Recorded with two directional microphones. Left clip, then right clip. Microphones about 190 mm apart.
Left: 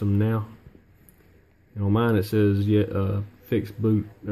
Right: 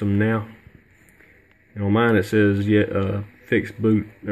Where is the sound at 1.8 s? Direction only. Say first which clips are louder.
Right 5 dB; centre (ahead or behind).